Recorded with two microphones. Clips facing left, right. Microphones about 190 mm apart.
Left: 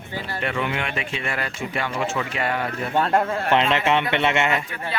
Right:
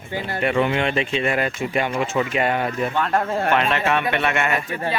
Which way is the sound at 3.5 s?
20° left (ahead or behind).